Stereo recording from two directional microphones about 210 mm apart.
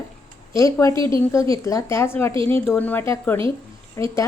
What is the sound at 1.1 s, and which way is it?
A woman's voice, 15° left (ahead or behind).